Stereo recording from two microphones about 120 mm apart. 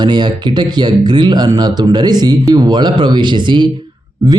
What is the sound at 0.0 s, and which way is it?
A man's voice, 40° right (ahead or behind).